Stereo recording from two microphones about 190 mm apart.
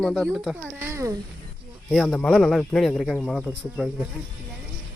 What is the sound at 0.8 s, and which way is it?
Speech, 15° right (ahead or behind).